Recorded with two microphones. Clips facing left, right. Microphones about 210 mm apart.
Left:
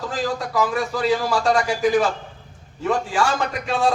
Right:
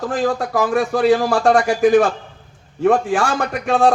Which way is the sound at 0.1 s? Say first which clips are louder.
Right 5 dB; 55° right (ahead or behind).